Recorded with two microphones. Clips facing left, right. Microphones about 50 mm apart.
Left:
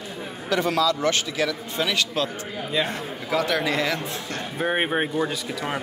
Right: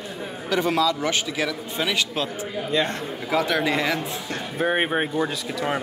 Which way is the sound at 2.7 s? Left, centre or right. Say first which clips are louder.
Right 2 dB; centre.